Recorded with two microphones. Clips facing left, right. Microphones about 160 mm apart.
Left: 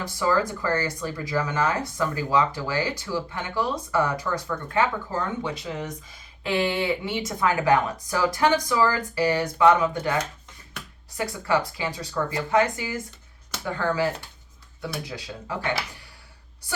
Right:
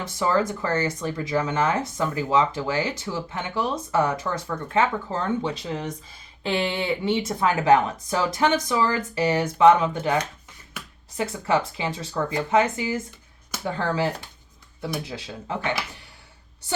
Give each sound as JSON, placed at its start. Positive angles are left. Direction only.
{"t": 0.0, "sound": "speech", "side_deg": -25}
{"t": 11.2, "sound": "speech", "side_deg": -25}